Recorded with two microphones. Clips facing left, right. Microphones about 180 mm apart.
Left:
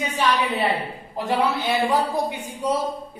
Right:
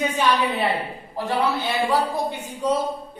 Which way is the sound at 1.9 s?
15° left (ahead or behind).